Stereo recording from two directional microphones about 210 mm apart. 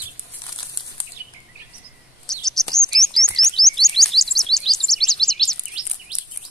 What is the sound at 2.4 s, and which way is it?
Chirp, centre (ahead or behind).